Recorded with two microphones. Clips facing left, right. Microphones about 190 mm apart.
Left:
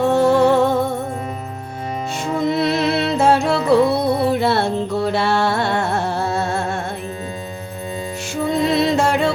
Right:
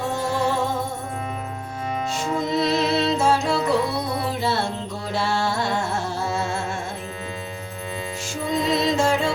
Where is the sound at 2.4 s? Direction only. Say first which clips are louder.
Left 4 dB; 60° left (ahead or behind).